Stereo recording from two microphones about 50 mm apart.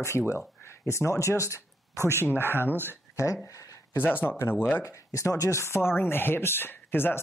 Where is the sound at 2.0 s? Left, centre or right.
Right.